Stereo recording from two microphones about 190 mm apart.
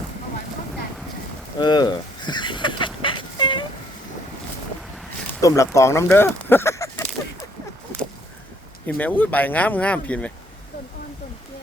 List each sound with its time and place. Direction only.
1.5 s a sound: 25° left (ahead or behind)
5.4 s speech: 15° left (ahead or behind)
9.0 s speech: 10° left (ahead or behind)